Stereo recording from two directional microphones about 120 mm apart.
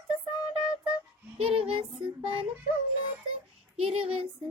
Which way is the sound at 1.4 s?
50° right (ahead or behind).